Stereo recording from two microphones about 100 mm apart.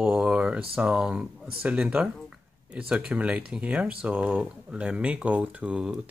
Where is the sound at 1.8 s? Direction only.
5° right (ahead or behind).